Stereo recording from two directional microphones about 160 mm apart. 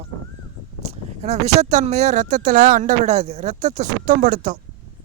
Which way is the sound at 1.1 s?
45° right (ahead or behind).